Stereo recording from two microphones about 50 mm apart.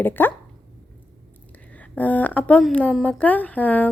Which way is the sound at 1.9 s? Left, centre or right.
Left.